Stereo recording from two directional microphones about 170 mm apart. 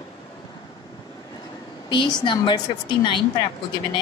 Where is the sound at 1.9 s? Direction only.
25° left (ahead or behind).